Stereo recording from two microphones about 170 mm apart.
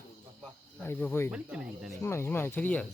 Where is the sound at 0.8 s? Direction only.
10° left (ahead or behind).